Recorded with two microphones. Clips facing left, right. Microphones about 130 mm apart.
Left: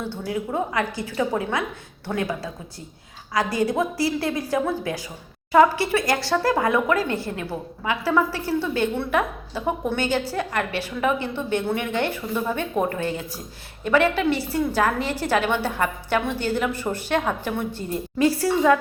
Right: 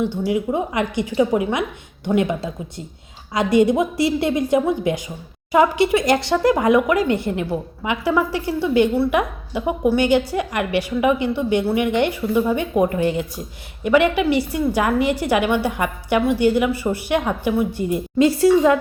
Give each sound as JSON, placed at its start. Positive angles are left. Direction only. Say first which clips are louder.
{"t": 0.3, "sound": "a woman's voice", "louder": "right 5 dB", "side_deg": -15}